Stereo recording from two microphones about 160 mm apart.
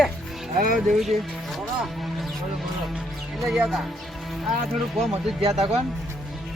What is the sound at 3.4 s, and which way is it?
Speech, centre (ahead or behind).